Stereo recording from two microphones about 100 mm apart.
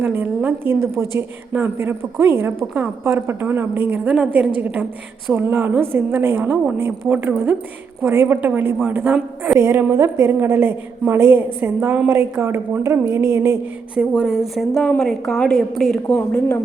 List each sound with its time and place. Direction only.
0.0 s a woman's voice: 20° right (ahead or behind)
9.1 s a woman's voice: 10° right (ahead or behind)
9.6 s a woman's voice: 25° right (ahead or behind)
13.9 s a woman's voice: 5° right (ahead or behind)